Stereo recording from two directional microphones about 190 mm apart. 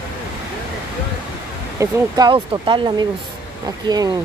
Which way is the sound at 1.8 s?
20° right (ahead or behind).